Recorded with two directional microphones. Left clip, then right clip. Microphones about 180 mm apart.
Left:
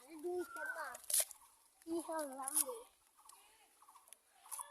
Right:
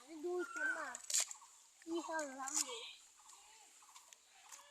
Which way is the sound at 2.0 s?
25° left (ahead or behind).